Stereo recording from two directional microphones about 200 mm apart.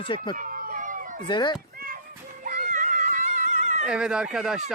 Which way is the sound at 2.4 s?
40° right (ahead or behind).